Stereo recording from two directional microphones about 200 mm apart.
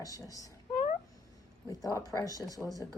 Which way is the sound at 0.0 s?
15° left (ahead or behind).